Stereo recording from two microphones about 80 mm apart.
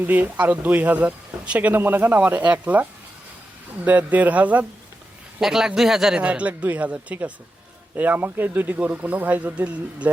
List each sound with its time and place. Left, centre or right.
0.0 s speech: right
3.8 s speech: centre
5.4 s speech: centre
6.2 s speech: centre